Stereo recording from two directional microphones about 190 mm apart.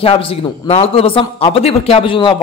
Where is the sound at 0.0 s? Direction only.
30° left (ahead or behind).